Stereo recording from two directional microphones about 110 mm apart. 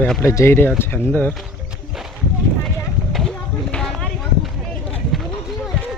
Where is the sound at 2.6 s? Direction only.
Centre (ahead or behind).